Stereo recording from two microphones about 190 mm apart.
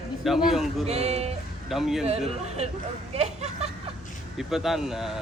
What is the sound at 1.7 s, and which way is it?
Speech, centre (ahead or behind).